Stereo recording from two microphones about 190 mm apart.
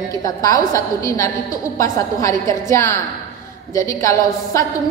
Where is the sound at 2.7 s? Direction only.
15° left (ahead or behind).